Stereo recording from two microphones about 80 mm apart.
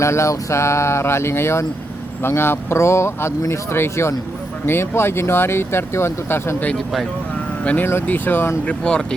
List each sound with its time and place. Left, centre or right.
0.0 s speech: left
6.7 s speech: centre
7.6 s speech: centre
7.9 s speech: left
8.6 s speech: centre